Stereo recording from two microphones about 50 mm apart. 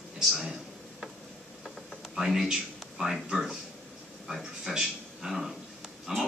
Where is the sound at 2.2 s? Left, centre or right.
Centre.